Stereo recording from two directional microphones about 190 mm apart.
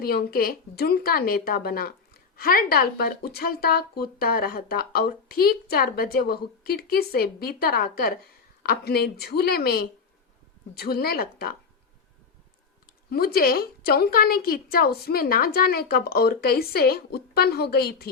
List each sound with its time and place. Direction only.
0.0 s speech: 50° left (ahead or behind)
13.1 s speech: 55° left (ahead or behind)